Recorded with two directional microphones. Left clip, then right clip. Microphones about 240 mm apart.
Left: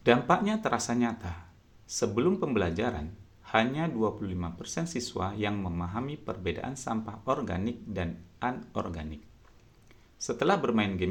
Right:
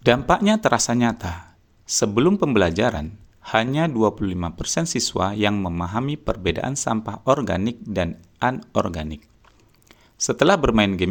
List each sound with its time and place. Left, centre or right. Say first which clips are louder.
0.0 s speech: right 7 dB; right